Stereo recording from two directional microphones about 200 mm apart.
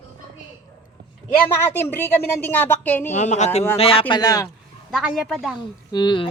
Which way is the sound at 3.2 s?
35° left (ahead or behind).